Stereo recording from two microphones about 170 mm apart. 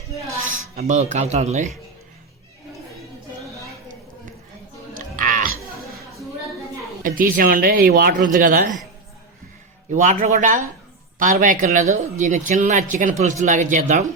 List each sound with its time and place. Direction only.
0.8 s speech: 45° right (ahead or behind)
4.9 s chewing: 55° right (ahead or behind)
7.0 s speech: 55° right (ahead or behind)
9.9 s speech: 50° right (ahead or behind)